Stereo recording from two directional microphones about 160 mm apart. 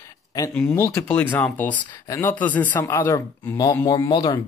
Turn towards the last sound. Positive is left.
turn(degrees=30)  # may be behind; listen again after turning